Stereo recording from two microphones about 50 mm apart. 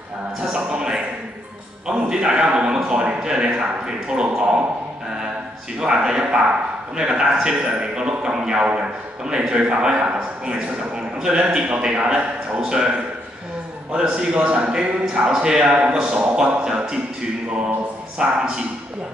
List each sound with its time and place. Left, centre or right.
0.4 s music: right
1.9 s a man's voice: centre
5.8 s a man's voice: centre
11.1 s a man's voice: centre
13.9 s a man's voice: centre
18.1 s a man's voice: centre